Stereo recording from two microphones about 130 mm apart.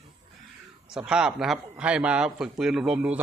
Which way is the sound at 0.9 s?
5° right (ahead or behind).